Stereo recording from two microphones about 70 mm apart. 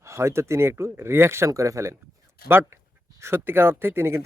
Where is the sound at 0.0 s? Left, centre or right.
Right.